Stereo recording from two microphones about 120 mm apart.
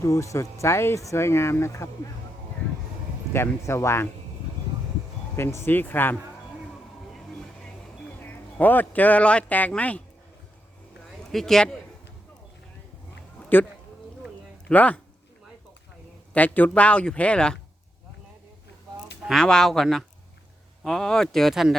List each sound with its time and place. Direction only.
0.0 s speech: 25° left (ahead or behind)
3.3 s speech: 20° left (ahead or behind)
5.4 s speech: 20° left (ahead or behind)
7.1 s music: centre (ahead or behind)
8.2 s a man's voice: 15° left (ahead or behind)
11.3 s speech: 5° left (ahead or behind)
14.7 s speech: 10° left (ahead or behind)
16.3 s speech: 15° left (ahead or behind)
19.3 s speech: 5° left (ahead or behind)